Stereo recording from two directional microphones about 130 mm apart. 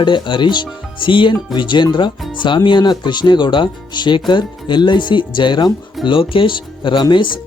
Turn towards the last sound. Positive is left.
turn(degrees=40)  # may be behind; listen again after turning